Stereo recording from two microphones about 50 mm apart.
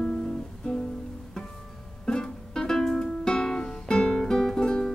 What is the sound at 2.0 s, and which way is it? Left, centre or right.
Music, centre.